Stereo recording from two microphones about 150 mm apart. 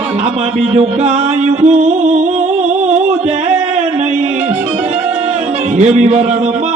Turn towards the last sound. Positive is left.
turn(degrees=-50)  # may be behind; listen again after turning